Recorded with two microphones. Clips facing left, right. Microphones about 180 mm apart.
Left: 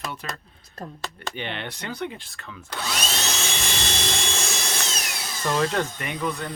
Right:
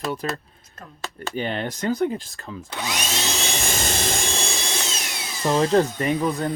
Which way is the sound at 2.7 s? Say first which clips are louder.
Right 1 dB; 15° right (ahead or behind).